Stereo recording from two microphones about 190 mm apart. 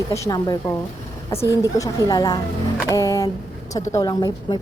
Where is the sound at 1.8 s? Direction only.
20° left (ahead or behind).